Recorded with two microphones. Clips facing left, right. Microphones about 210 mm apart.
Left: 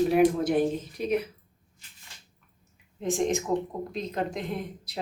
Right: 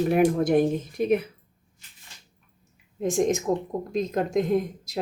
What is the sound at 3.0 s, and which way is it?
Speech, 45° right (ahead or behind).